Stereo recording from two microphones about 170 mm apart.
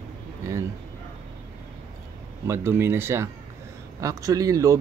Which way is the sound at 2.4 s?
15° right (ahead or behind).